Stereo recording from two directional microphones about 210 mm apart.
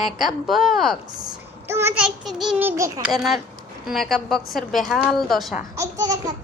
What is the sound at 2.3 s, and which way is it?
Speech, centre (ahead or behind).